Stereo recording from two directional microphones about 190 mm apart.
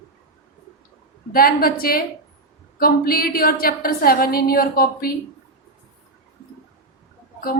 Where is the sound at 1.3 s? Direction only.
50° left (ahead or behind).